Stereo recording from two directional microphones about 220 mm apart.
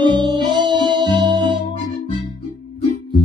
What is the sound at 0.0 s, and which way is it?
Music, 20° right (ahead or behind).